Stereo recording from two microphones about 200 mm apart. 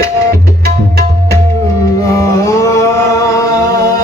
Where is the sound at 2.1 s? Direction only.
15° left (ahead or behind).